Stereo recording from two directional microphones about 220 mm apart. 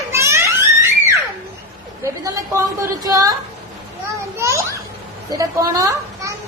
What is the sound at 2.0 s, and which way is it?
A woman's voice, 15° right (ahead or behind).